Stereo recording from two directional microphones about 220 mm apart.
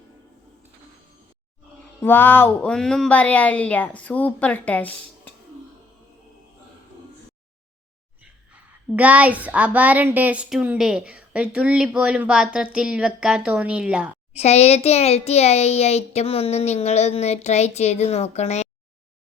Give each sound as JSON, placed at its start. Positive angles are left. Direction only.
{"t": 2.0, "sound": "speech", "side_deg": 10}
{"t": 8.2, "sound": "speech", "side_deg": -5}
{"t": 14.3, "sound": "a child's voice", "side_deg": 30}